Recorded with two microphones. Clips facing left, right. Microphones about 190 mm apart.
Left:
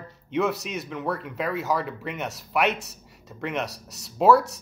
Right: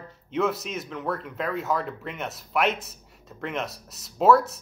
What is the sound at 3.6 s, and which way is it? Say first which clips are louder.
Speech: left 1 dB; 70° left (ahead or behind).